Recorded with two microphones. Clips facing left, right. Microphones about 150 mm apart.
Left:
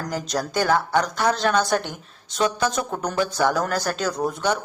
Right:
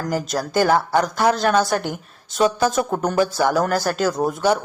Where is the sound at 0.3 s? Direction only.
5° right (ahead or behind).